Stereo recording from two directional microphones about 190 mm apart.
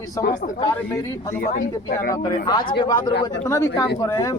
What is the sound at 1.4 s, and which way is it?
Speech, 45° left (ahead or behind).